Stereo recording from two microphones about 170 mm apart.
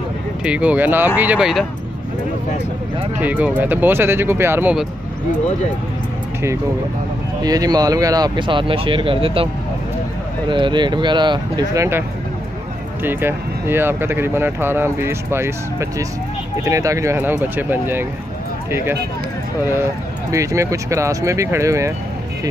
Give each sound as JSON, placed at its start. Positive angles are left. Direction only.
{"t": 0.4, "sound": "speech", "side_deg": -5}
{"t": 3.2, "sound": "speech", "side_deg": -10}
{"t": 7.4, "sound": "speech", "side_deg": -20}
{"t": 10.5, "sound": "speech", "side_deg": -25}
{"t": 13.0, "sound": "speech", "side_deg": -10}
{"t": 20.2, "sound": "speech", "side_deg": -20}